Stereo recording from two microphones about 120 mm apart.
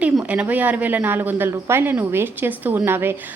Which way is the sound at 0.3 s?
10° right (ahead or behind).